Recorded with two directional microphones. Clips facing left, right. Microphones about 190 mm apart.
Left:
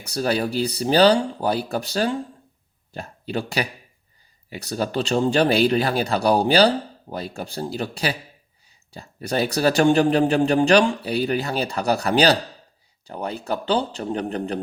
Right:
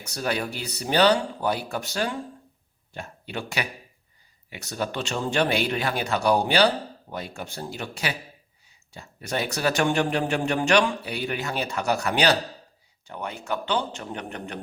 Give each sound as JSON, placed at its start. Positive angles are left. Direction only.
{"t": 0.0, "sound": "speech", "side_deg": 35}